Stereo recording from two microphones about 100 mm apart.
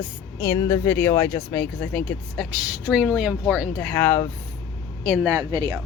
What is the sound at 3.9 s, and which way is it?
Speech, 25° left (ahead or behind).